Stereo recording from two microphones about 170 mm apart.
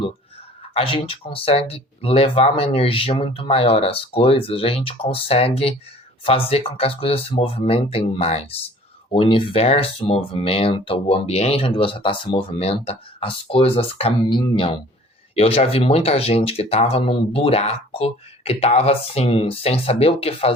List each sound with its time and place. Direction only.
0.7 s speech: 35° left (ahead or behind)